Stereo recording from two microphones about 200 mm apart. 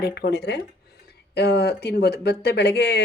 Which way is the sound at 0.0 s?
55° left (ahead or behind).